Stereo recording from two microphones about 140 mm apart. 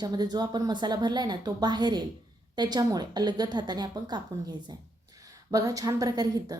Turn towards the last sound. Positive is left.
turn(degrees=-30)  # may be behind; listen again after turning